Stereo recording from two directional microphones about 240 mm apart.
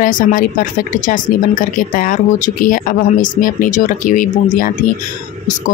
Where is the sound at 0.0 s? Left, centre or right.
Left.